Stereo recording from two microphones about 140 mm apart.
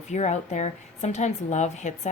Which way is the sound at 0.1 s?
55° left (ahead or behind).